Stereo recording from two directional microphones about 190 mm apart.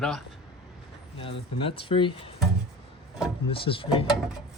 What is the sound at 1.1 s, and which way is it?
Speech, 30° left (ahead or behind).